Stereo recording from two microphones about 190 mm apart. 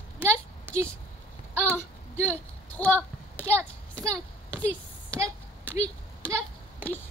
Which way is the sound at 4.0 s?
20° right (ahead or behind).